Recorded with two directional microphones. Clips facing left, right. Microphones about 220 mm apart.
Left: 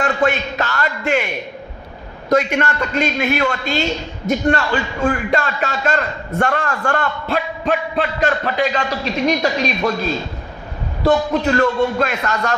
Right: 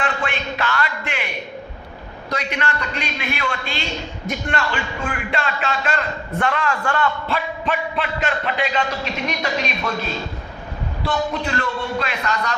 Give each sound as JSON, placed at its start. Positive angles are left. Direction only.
{"t": 0.0, "sound": "a man's voice", "side_deg": 40}
{"t": 2.3, "sound": "a man's voice", "side_deg": 45}
{"t": 11.1, "sound": "a man's voice", "side_deg": 40}